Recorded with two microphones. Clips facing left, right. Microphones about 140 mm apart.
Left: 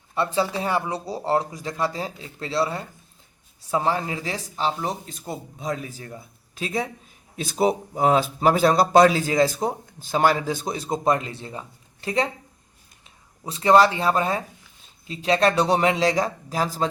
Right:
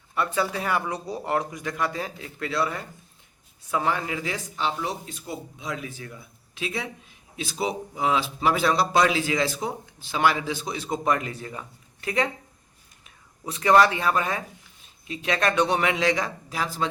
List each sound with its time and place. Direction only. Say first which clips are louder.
0.1 s a man's voice: left 2 dB; 25° left (ahead or behind)